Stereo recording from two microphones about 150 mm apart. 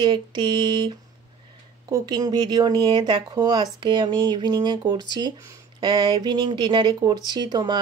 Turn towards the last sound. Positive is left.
turn(degrees=-30)  # may be behind; listen again after turning